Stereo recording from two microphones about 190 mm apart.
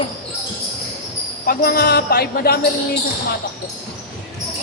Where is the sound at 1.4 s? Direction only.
50° left (ahead or behind).